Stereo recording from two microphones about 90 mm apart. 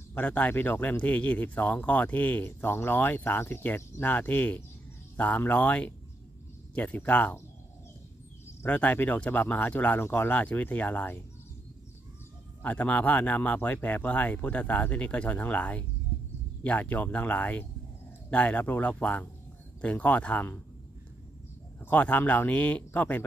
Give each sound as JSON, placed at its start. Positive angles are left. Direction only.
{"t": 0.1, "sound": "speech", "side_deg": 20}
{"t": 8.6, "sound": "speech", "side_deg": 20}
{"t": 12.6, "sound": "speech", "side_deg": 15}
{"t": 21.7, "sound": "speech", "side_deg": 20}